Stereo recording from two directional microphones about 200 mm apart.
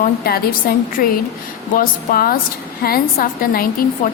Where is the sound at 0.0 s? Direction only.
50° left (ahead or behind).